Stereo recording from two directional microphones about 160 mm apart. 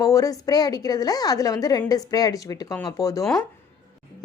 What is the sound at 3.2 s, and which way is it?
Speech, centre (ahead or behind).